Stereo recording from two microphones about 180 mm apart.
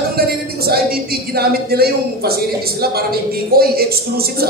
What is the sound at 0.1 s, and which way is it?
Speech, 60° right (ahead or behind).